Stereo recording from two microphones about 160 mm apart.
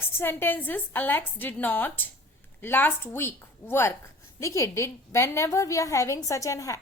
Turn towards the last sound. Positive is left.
turn(degrees=20)  # may be behind; listen again after turning